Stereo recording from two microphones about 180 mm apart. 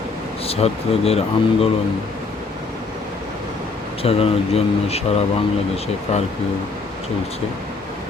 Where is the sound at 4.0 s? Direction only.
35° left (ahead or behind).